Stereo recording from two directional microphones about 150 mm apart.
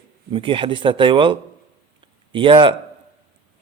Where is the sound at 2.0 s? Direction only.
35° right (ahead or behind).